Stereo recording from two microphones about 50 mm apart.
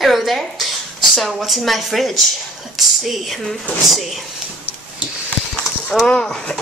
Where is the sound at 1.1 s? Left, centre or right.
Centre.